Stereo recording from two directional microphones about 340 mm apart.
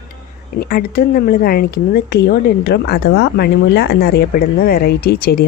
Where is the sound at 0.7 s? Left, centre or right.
Left.